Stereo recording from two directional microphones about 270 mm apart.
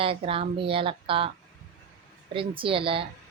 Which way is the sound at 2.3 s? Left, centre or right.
Centre.